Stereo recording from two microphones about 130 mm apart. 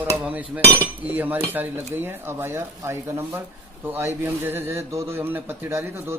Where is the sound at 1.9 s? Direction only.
15° right (ahead or behind).